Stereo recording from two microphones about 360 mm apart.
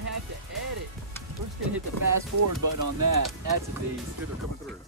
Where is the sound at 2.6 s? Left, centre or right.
Right.